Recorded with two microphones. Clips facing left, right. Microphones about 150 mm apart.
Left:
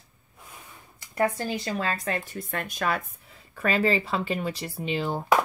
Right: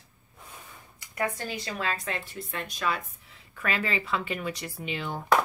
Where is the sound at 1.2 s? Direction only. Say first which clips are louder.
Left 5 dB; 30° left (ahead or behind); by 3.4 s 50° left (ahead or behind).